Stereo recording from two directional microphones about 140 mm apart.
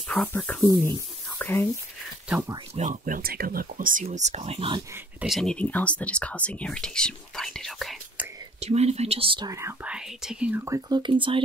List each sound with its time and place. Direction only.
0.1 s speech: 10° left (ahead or behind)
2.7 s speech: 65° right (ahead or behind); by 4.8 s 40° right (ahead or behind)
5.3 s speech: 5° left (ahead or behind)
8.5 s speech: 50° right (ahead or behind)
9.5 s speech: 20° right (ahead or behind)
9.8 s speech: 5° right (ahead or behind)
10.6 s speech: 20° right (ahead or behind)
11.0 s speech: 35° right (ahead or behind)